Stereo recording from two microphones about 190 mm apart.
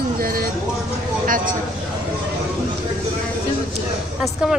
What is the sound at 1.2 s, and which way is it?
Speech, 45° right (ahead or behind).